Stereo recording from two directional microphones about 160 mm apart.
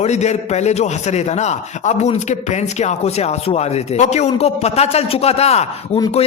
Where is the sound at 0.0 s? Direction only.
45° left (ahead or behind).